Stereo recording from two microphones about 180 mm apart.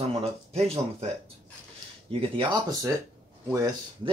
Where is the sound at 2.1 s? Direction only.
30° right (ahead or behind).